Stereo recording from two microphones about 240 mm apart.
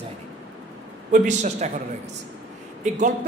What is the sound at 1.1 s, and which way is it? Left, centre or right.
Speech, right.